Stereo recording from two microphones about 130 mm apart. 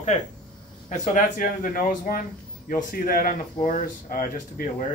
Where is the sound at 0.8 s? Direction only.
75° left (ahead or behind).